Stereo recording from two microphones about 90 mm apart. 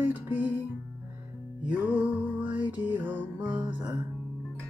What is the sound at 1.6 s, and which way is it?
Music, 15° right (ahead or behind).